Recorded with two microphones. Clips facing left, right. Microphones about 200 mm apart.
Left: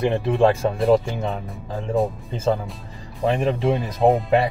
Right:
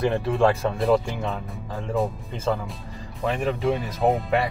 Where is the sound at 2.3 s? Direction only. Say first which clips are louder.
Left 5 dB; 25° left (ahead or behind).